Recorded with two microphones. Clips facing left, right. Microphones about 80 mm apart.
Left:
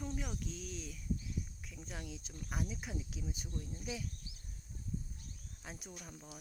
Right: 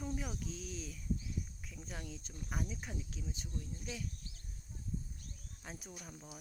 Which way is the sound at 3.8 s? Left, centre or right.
Centre.